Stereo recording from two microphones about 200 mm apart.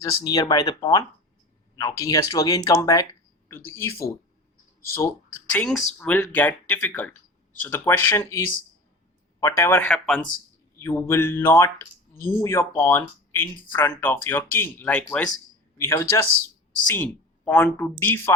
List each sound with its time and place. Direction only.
0.3 s speech: 20° left (ahead or behind)
9.4 s speech: 15° left (ahead or behind)